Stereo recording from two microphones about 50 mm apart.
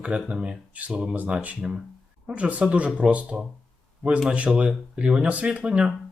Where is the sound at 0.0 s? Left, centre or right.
Right.